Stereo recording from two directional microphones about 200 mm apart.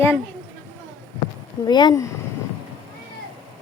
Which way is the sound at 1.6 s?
20° left (ahead or behind).